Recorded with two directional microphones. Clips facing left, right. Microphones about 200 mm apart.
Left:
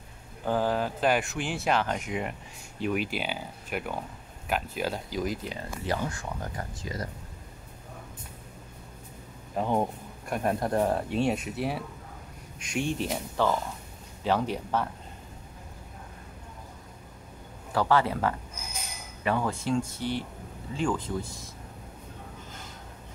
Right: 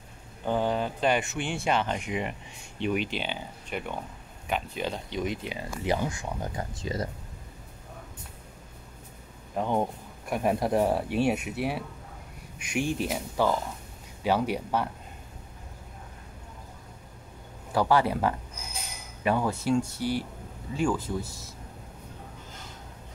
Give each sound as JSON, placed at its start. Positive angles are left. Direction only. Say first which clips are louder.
{"t": 0.5, "sound": "speech", "louder": "even", "side_deg": 5}
{"t": 5.6, "sound": "speech", "louder": "right 5 dB", "side_deg": -15}
{"t": 9.6, "sound": "speech", "louder": "even", "side_deg": 0}
{"t": 17.7, "sound": "speech", "louder": "right 1 dB", "side_deg": -10}